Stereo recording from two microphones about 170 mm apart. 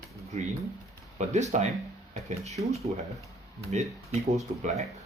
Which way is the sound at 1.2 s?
45° right (ahead or behind).